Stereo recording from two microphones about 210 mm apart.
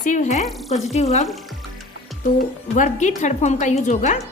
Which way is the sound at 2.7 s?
35° left (ahead or behind).